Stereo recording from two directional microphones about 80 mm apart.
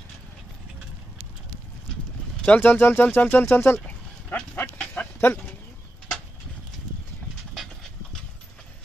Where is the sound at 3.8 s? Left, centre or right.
Left.